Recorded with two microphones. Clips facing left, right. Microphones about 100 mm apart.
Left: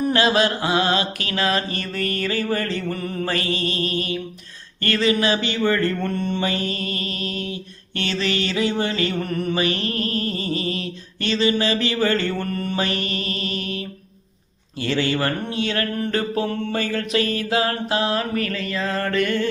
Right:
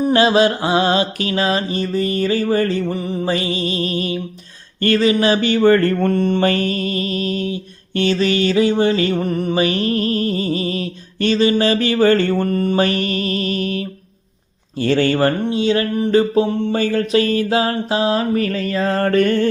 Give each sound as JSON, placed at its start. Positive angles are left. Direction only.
{"t": 0.0, "sound": "mantra", "side_deg": -30}
{"t": 2.9, "sound": "mantra", "side_deg": -15}
{"t": 6.7, "sound": "music", "side_deg": 35}
{"t": 7.4, "sound": "mantra", "side_deg": -30}
{"t": 13.0, "sound": "music", "side_deg": 30}
{"t": 14.8, "sound": "speech", "side_deg": -45}
{"t": 15.2, "sound": "mantra", "side_deg": -25}